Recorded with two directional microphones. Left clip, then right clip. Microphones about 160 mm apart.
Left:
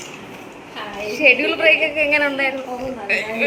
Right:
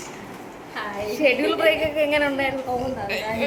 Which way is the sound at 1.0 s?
10° right (ahead or behind).